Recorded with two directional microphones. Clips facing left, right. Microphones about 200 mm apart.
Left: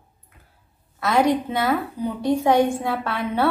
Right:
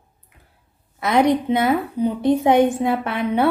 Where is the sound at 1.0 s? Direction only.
20° right (ahead or behind).